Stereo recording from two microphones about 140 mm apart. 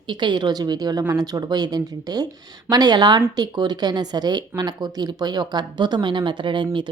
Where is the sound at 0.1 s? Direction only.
35° right (ahead or behind).